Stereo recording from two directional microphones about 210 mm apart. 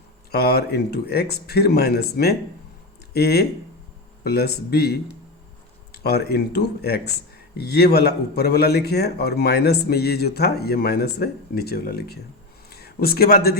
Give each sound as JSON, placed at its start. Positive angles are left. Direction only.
{"t": 0.3, "sound": "a man's voice", "side_deg": 50}